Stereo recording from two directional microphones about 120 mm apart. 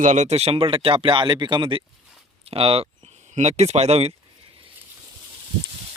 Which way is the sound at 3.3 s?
70° right (ahead or behind).